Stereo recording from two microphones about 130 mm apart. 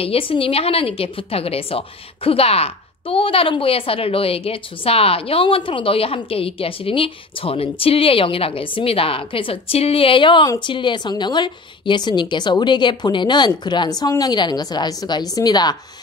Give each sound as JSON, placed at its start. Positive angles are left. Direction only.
{"t": 0.0, "sound": "a woman's voice", "side_deg": 45}